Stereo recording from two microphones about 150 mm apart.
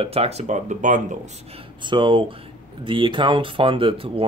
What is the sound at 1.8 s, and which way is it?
Speech, 30° right (ahead or behind).